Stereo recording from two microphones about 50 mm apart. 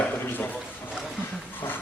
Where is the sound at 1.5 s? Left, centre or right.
Left.